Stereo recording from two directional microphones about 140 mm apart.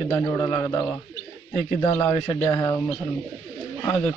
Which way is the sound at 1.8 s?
15° left (ahead or behind).